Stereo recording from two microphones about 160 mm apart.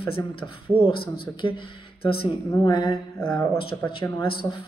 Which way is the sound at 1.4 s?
30° left (ahead or behind).